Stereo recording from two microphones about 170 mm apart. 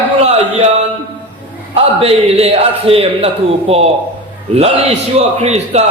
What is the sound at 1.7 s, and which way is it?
A man's voice, 35° right (ahead or behind).